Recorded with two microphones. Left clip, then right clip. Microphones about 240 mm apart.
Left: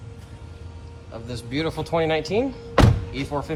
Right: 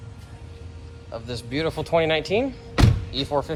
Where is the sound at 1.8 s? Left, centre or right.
Right.